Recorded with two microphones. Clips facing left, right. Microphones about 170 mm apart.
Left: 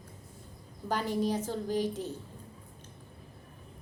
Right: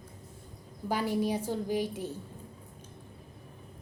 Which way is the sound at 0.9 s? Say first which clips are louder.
Right 1 dB; 10° right (ahead or behind).